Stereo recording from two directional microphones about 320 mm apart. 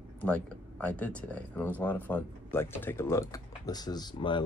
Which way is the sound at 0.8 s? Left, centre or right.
Centre.